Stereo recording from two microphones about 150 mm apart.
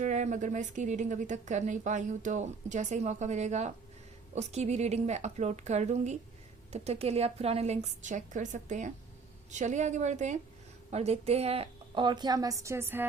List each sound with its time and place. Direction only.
0.0 s a woman's voice: 55° right (ahead or behind); by 13.1 s 15° right (ahead or behind)